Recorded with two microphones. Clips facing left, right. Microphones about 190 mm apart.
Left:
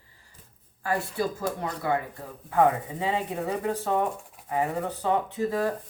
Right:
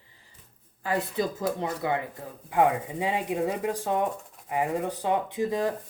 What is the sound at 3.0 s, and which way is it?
Speech, 15° right (ahead or behind).